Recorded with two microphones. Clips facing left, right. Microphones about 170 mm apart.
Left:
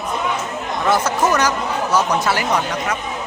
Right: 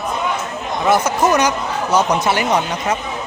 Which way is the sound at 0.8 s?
10° right (ahead or behind).